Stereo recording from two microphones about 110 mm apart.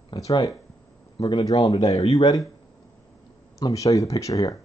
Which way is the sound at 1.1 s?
45° left (ahead or behind).